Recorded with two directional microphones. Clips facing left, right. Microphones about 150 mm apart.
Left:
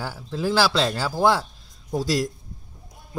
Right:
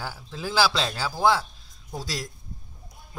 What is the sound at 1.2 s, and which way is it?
Mantra, 10° left (ahead or behind).